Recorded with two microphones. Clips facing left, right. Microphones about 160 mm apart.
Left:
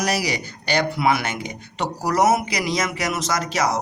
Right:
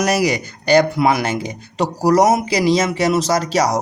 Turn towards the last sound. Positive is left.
turn(degrees=-35)  # may be behind; listen again after turning